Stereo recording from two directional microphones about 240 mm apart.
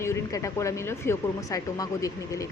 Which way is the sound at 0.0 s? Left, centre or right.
Centre.